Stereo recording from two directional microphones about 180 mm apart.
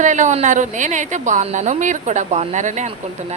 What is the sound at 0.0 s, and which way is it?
A woman's voice, 45° right (ahead or behind).